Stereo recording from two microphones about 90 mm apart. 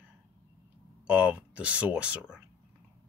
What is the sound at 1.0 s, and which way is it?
Speech, 15° right (ahead or behind).